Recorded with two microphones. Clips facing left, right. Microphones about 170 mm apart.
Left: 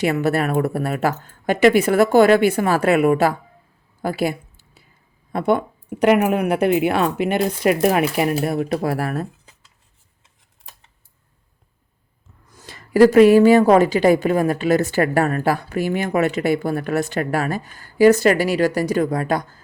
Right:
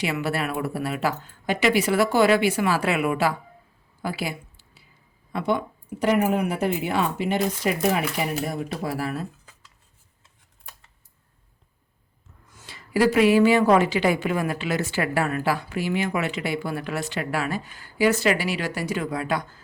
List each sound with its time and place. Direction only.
0.0 s a woman's voice: 45° left (ahead or behind)
4.0 s a sound: 50° left (ahead or behind)
5.3 s speech: 55° left (ahead or behind)
12.5 s a woman's voice: 40° left (ahead or behind)